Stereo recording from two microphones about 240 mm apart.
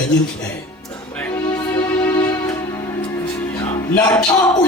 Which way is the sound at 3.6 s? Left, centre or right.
Centre.